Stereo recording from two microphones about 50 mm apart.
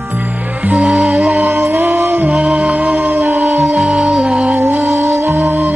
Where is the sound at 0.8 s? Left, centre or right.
Centre.